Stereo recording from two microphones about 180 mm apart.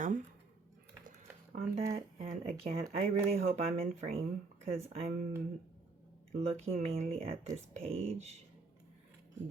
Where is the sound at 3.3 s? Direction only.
35° right (ahead or behind).